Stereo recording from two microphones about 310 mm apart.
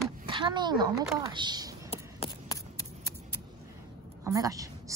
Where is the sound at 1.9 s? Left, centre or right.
Centre.